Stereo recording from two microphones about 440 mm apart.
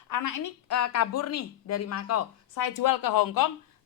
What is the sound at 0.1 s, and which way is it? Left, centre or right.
A woman's voice, left.